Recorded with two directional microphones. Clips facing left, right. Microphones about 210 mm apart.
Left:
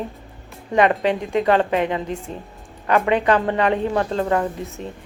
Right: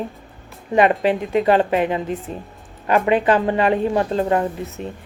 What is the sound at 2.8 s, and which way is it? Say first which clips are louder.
Speech: right 1 dB; 25° right (ahead or behind).